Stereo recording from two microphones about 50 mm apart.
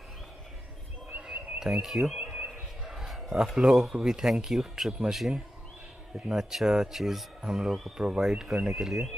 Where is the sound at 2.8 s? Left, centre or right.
Centre.